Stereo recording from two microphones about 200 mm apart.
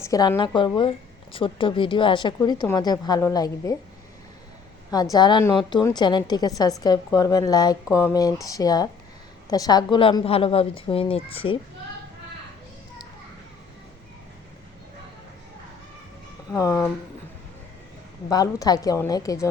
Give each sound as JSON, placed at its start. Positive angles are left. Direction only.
{"t": 0.0, "sound": "a woman's voice", "side_deg": 20}
{"t": 5.1, "sound": "a woman's voice", "side_deg": 20}
{"t": 16.5, "sound": "speech", "side_deg": 15}
{"t": 18.3, "sound": "speech", "side_deg": 20}